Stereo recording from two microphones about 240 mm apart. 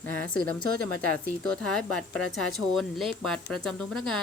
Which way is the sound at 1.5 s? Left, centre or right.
Centre.